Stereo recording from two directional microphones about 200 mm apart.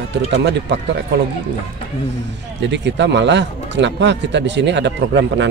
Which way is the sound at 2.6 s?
60° right (ahead or behind).